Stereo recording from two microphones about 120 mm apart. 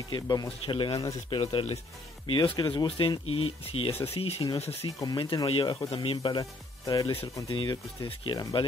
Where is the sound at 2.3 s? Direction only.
40° left (ahead or behind); by 4.8 s 55° left (ahead or behind).